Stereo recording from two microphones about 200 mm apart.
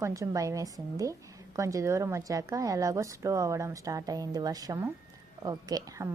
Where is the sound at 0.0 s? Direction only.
15° right (ahead or behind).